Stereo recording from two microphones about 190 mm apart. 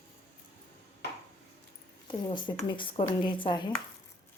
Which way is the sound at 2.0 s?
25° left (ahead or behind).